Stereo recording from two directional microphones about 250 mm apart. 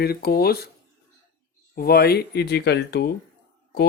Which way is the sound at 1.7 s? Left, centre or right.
Left.